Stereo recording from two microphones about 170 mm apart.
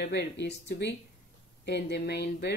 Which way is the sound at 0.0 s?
75° left (ahead or behind).